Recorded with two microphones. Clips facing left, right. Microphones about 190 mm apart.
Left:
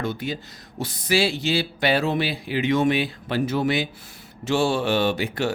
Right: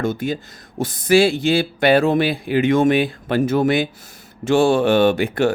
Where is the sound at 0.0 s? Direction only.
45° right (ahead or behind).